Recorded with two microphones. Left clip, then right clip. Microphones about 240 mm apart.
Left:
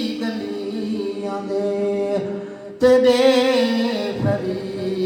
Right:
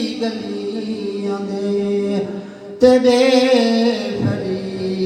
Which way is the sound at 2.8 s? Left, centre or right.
Left.